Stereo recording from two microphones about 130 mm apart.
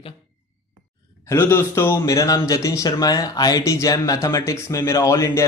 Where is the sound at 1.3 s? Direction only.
20° left (ahead or behind).